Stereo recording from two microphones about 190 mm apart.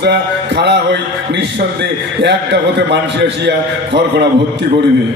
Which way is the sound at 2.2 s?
65° right (ahead or behind).